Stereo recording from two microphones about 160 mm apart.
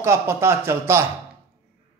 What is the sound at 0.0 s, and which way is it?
A man's voice, 15° right (ahead or behind).